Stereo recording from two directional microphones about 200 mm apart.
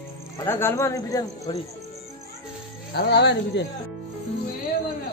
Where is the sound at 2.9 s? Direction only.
55° left (ahead or behind).